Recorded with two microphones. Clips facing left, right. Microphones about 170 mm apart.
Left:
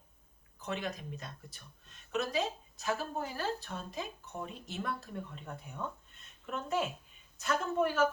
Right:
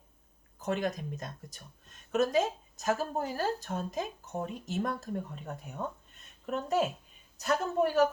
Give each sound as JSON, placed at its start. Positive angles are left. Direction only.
{"t": 0.6, "sound": "speech", "side_deg": -45}